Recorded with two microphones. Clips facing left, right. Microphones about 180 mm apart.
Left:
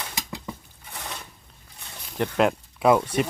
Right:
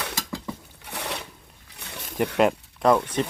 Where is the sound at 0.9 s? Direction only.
70° right (ahead or behind).